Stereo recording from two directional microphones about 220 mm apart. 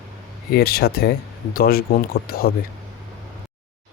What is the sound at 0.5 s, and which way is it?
Speech, 45° left (ahead or behind).